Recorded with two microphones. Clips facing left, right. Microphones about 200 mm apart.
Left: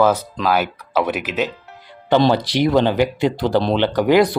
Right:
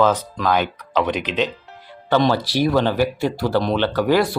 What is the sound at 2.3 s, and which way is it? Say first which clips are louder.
Speech: left 2 dB; 20° left (ahead or behind).